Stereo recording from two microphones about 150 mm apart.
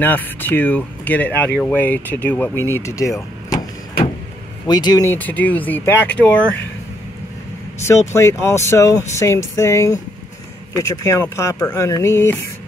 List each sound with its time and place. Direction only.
0.0 s speech: 10° left (ahead or behind)
4.6 s speech: 25° left (ahead or behind)
5.1 s speech: 10° left (ahead or behind)
7.8 s speech: 20° left (ahead or behind)